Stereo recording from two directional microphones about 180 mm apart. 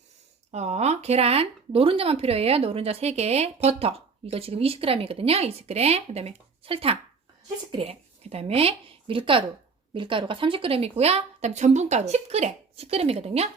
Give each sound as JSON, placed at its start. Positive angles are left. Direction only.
{"t": 0.5, "sound": "a woman's voice", "side_deg": -40}